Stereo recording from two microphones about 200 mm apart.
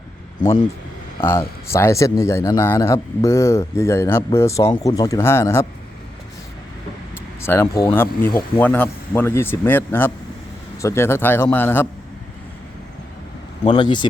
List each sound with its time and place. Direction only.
1.2 s speech: 10° left (ahead or behind)
7.4 s speech: 10° left (ahead or behind)
13.7 s speech: 20° left (ahead or behind)